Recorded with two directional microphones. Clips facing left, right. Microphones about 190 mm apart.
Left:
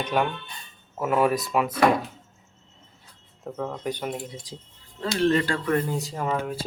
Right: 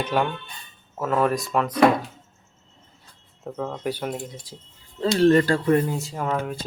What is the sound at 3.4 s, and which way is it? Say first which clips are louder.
Speech: right 2 dB; centre (ahead or behind).